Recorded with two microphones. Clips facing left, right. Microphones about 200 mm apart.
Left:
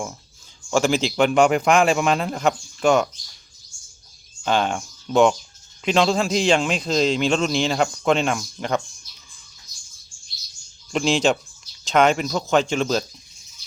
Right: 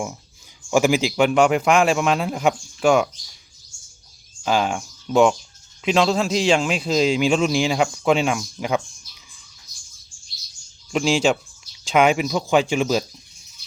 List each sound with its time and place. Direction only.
0.7 s a man's voice: 10° right (ahead or behind)
4.4 s a man's voice: 5° right (ahead or behind)
10.9 s speech: 5° right (ahead or behind)